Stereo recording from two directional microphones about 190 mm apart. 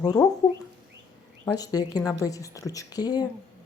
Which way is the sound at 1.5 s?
20° left (ahead or behind).